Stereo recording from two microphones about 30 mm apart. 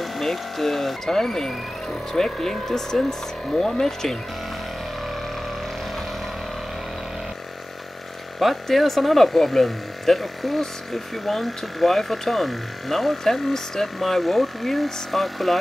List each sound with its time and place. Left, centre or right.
0.0 s speech: centre
8.4 s speech: centre